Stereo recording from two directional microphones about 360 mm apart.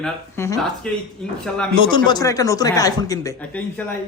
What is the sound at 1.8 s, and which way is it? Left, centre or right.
Speech, centre.